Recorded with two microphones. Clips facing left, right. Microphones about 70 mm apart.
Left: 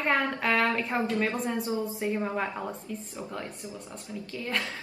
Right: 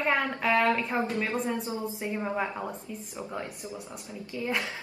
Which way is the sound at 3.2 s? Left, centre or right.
Centre.